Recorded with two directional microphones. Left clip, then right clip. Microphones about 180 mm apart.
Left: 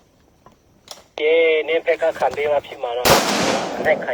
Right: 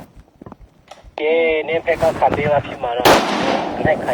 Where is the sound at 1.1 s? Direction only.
45° left (ahead or behind).